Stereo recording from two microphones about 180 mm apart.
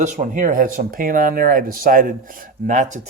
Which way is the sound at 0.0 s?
45° right (ahead or behind).